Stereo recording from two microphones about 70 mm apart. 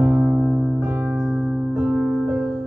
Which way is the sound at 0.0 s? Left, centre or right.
Centre.